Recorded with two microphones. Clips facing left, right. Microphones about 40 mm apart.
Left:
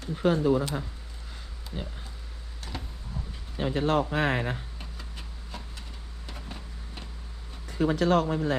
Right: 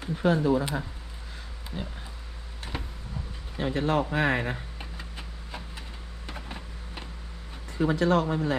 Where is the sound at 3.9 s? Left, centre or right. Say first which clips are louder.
Right 1 dB; right.